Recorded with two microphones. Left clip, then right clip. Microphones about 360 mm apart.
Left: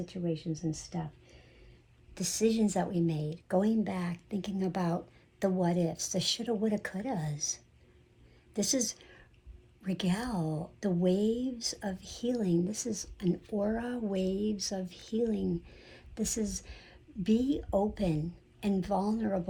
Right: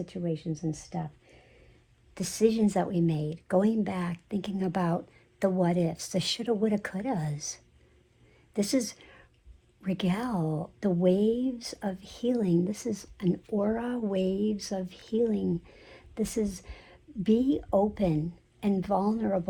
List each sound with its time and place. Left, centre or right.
0.0 s a woman's voice: right